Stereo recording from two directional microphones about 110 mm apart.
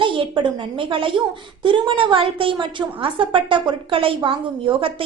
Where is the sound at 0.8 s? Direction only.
50° right (ahead or behind).